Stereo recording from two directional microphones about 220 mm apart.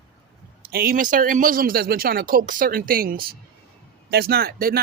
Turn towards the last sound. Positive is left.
turn(degrees=-40)  # may be behind; listen again after turning